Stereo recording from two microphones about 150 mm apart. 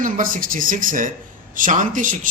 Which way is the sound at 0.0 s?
65° right (ahead or behind).